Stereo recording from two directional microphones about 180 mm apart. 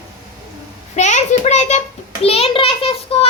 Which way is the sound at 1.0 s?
40° left (ahead or behind).